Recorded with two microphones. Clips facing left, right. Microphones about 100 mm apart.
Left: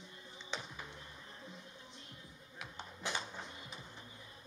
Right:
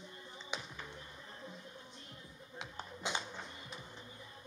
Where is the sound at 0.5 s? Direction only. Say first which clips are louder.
Even; 15° right (ahead or behind).